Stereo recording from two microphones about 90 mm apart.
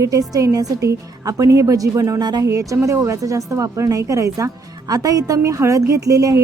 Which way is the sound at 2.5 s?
35° right (ahead or behind).